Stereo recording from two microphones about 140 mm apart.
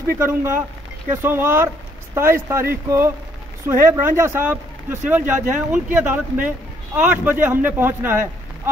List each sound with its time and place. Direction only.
0.0 s speech: 15° right (ahead or behind)